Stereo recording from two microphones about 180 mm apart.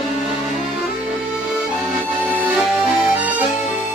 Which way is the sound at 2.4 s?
Centre (ahead or behind).